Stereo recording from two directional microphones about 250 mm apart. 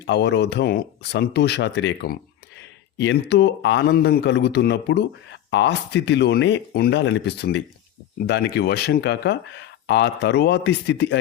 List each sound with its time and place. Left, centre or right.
0.0 s a man's voice: left